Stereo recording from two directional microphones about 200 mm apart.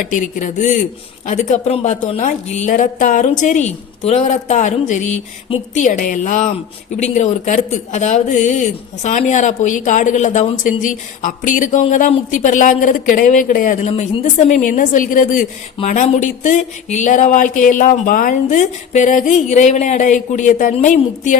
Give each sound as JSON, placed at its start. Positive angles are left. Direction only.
{"t": 0.1, "sound": "a woman's voice", "side_deg": 40}